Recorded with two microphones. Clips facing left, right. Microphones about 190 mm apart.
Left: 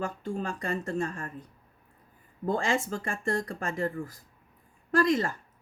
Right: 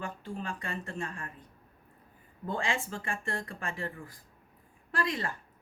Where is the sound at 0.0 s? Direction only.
40° left (ahead or behind).